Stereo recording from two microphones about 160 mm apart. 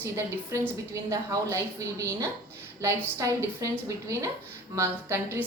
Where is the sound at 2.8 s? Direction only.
20° right (ahead or behind).